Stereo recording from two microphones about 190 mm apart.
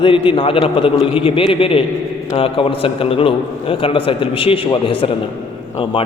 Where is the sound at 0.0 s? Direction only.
25° left (ahead or behind).